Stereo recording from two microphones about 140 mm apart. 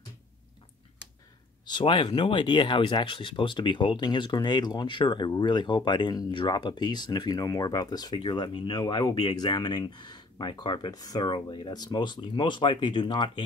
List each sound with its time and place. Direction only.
1.7 s speech: 30° left (ahead or behind)